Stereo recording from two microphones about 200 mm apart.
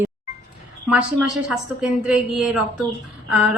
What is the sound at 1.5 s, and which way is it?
Speech, 5° right (ahead or behind).